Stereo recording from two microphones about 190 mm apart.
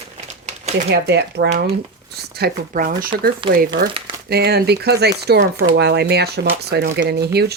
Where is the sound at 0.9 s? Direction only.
60° right (ahead or behind).